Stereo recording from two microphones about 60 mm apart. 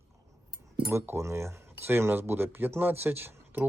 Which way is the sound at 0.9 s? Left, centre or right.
Right.